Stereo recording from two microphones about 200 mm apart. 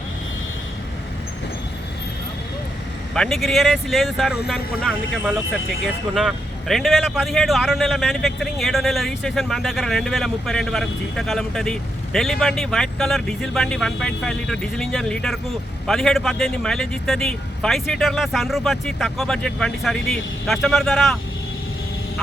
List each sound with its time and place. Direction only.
3.2 s speech: centre (ahead or behind)